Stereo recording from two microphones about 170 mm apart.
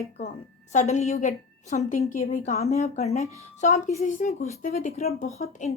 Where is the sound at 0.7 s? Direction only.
45° left (ahead or behind).